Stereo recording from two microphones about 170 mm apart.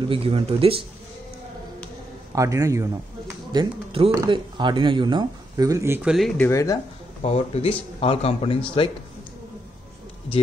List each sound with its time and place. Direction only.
0.1 s speech: 35° right (ahead or behind)
2.3 s speech: 20° right (ahead or behind)
3.5 s speech: 35° right (ahead or behind)
4.1 s speech: 25° right (ahead or behind)
6.0 s speech: centre (ahead or behind); by 6.8 s 20° left (ahead or behind)
7.2 s speech: 40° left (ahead or behind)